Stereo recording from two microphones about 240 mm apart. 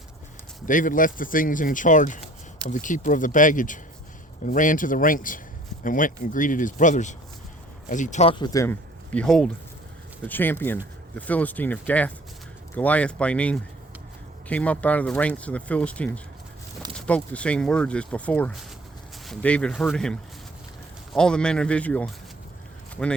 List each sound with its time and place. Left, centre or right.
0.6 s speech: left; by 22.1 s centre